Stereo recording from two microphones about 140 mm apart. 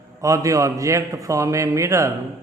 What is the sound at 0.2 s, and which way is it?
Speech, 25° right (ahead or behind).